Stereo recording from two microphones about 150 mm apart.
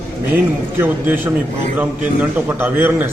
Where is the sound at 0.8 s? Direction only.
15° right (ahead or behind).